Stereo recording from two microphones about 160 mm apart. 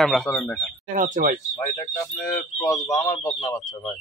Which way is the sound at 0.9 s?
55° right (ahead or behind).